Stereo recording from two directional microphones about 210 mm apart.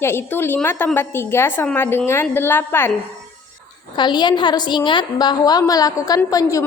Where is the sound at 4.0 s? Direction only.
20° left (ahead or behind).